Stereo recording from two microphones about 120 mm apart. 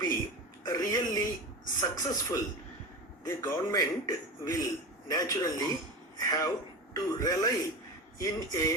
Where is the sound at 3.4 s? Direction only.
30° left (ahead or behind).